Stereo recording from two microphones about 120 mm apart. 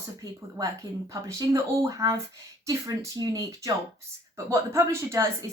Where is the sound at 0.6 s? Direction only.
30° right (ahead or behind).